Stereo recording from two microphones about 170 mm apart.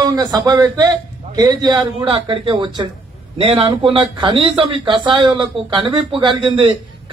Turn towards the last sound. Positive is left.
turn(degrees=-30)  # may be behind; listen again after turning